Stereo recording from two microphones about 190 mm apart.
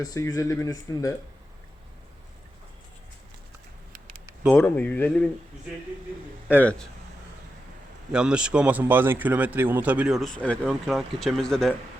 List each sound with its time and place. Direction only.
0.0 s speech: 20° left (ahead or behind)
4.5 s speech: 10° left (ahead or behind)
6.6 s speech: 5° left (ahead or behind)
8.1 s speech: 5° right (ahead or behind)